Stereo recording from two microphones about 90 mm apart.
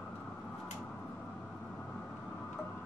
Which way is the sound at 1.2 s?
10° left (ahead or behind).